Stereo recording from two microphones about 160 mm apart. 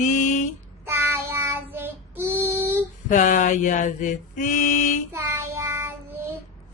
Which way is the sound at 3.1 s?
50° left (ahead or behind).